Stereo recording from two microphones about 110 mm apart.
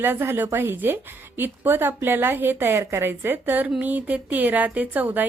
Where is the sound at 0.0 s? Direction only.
20° right (ahead or behind).